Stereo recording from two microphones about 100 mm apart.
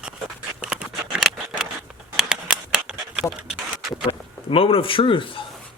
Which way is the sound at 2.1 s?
5° right (ahead or behind).